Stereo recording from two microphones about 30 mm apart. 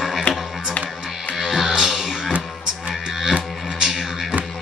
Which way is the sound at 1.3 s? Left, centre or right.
Centre.